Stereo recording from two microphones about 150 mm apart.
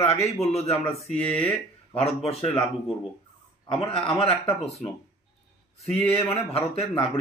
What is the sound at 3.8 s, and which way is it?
Speech, 40° left (ahead or behind).